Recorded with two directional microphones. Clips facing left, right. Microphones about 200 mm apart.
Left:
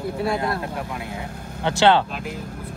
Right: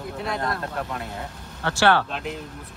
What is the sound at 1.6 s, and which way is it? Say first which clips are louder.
Speech: left 3 dB; 20° left (ahead or behind).